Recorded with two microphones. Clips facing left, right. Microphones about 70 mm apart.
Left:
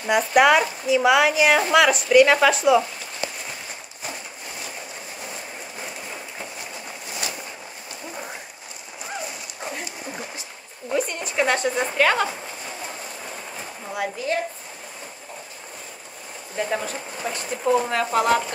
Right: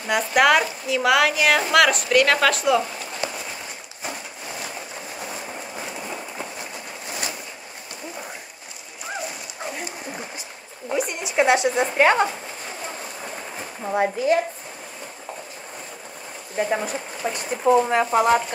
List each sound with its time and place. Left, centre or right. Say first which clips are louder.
0.0 s speech: left 2 dB; centre
9.8 s dog: right 1 dB; centre
10.9 s a sound: even; centre
13.9 s a woman's voice: right 6 dB; right
16.5 s a woman's voice: right 2 dB; centre